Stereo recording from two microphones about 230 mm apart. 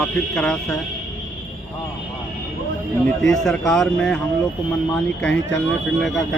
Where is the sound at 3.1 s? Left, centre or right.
Centre.